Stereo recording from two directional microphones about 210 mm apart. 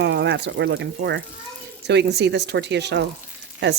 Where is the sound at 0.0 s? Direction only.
55° right (ahead or behind).